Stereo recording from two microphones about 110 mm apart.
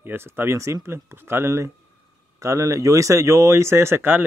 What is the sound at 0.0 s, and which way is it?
Speech, 20° right (ahead or behind).